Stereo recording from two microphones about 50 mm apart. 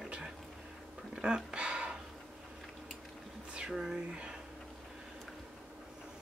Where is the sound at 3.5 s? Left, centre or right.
Centre.